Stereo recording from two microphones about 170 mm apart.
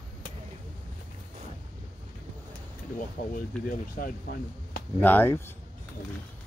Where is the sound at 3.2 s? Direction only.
55° left (ahead or behind).